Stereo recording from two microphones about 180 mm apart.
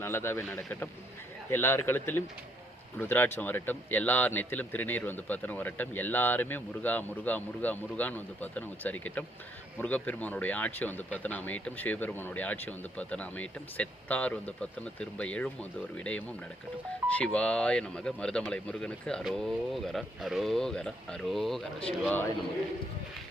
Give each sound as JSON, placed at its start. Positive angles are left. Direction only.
{"t": 0.0, "sound": "speech", "side_deg": 15}